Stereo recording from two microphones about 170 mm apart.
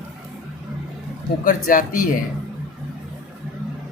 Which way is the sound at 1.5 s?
55° left (ahead or behind).